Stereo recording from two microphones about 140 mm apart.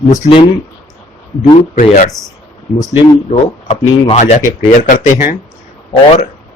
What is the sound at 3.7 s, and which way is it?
Speech, 55° left (ahead or behind).